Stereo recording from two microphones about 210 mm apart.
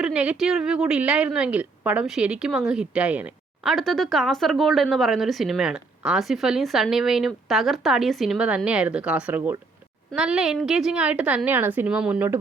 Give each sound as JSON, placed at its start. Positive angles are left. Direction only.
{"t": 0.0, "sound": "a woman's voice", "side_deg": -5}